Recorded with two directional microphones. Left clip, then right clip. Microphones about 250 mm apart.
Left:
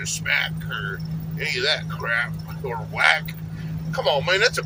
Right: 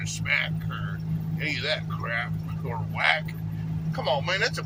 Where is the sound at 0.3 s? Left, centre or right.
Centre.